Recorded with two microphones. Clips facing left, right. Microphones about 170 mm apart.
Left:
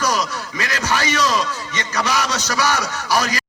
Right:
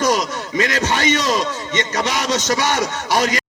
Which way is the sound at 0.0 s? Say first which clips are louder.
Right 3 dB; 25° right (ahead or behind).